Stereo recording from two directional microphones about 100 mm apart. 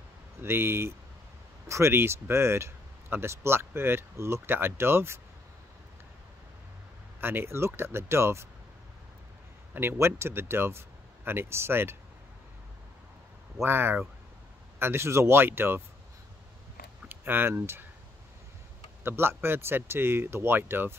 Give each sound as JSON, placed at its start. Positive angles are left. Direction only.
{"t": 0.4, "sound": "speech", "side_deg": -25}
{"t": 7.2, "sound": "speech", "side_deg": -20}
{"t": 9.8, "sound": "speech", "side_deg": -25}
{"t": 13.6, "sound": "speech", "side_deg": -25}
{"t": 17.1, "sound": "speech", "side_deg": -20}
{"t": 19.0, "sound": "speech", "side_deg": -25}